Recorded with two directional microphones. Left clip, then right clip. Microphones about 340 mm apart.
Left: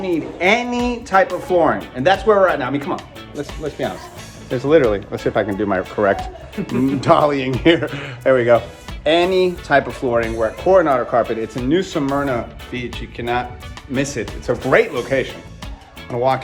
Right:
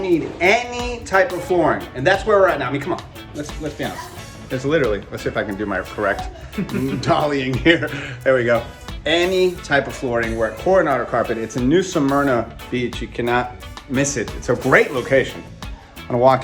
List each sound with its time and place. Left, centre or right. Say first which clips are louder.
0.0 s speech: right 1 dB; centre
4.5 s speech: left 4 dB; centre